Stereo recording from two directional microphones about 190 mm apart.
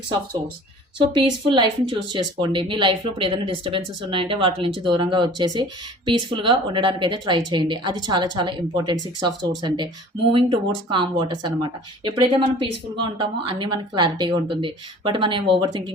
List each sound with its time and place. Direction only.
1.1 s speech: 25° right (ahead or behind)